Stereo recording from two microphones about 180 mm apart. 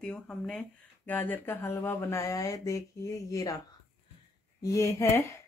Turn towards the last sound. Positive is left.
turn(degrees=15)  # may be behind; listen again after turning